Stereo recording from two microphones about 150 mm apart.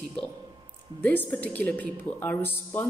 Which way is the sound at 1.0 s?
10° left (ahead or behind).